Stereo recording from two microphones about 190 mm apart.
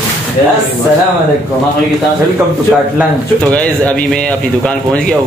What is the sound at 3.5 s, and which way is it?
Speech, 5° left (ahead or behind).